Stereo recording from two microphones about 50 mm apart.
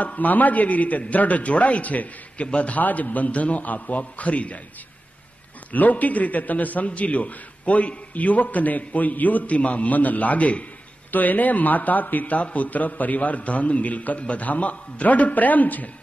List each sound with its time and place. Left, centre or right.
0.0 s a man's voice: left
5.7 s a man's voice: left